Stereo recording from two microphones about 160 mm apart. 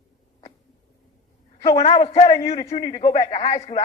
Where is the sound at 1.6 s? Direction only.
40° left (ahead or behind).